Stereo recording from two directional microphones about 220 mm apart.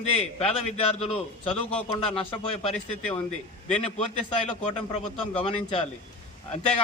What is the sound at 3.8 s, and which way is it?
Speech, 25° left (ahead or behind).